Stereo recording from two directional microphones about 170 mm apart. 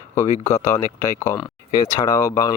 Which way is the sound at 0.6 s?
15° left (ahead or behind).